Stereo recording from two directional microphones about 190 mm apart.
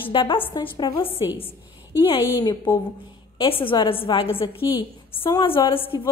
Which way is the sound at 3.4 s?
30° left (ahead or behind).